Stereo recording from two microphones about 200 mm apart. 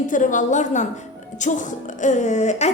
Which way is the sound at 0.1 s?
40° left (ahead or behind).